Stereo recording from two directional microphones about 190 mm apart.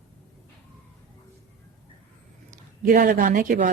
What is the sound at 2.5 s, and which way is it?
A woman's voice, 50° right (ahead or behind).